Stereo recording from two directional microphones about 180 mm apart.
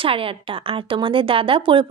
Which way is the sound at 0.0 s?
30° right (ahead or behind).